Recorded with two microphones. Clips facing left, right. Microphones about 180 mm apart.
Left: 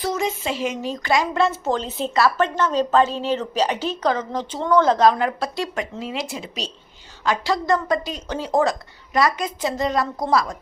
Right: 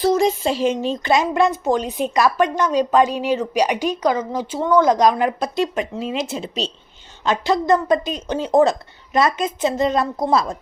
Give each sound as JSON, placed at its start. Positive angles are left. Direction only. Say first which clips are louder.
{"t": 0.0, "sound": "a woman's voice", "louder": "right 7 dB", "side_deg": -35}